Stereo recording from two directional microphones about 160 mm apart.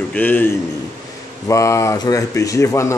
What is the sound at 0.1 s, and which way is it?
Speech, 10° left (ahead or behind).